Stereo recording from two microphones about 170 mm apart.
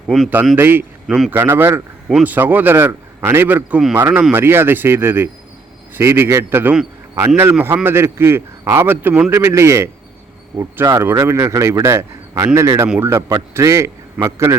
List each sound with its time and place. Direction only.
0.5 s a man's voice: 10° right (ahead or behind)
1.0 s speech: centre (ahead or behind)
1.3 s a man's voice: 10° right (ahead or behind)